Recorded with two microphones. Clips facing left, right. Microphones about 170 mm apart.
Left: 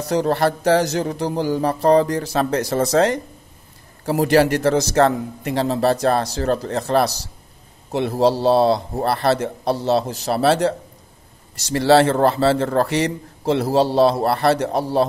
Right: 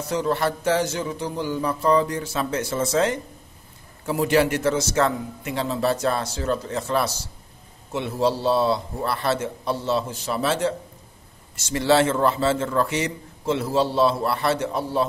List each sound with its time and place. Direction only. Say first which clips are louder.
0.0 s a man's voice: left 5 dB; 35° left (ahead or behind)
4.0 s a man's voice: left 4 dB; 40° left (ahead or behind)